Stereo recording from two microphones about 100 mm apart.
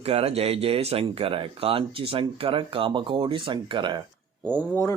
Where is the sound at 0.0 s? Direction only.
90° right; by 4.0 s 50° right (ahead or behind).